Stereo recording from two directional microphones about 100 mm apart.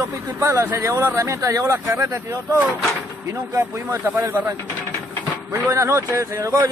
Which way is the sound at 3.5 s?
30° right (ahead or behind).